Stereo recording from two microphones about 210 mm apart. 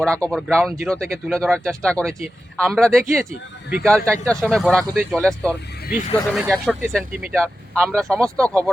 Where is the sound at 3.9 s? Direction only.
5° left (ahead or behind).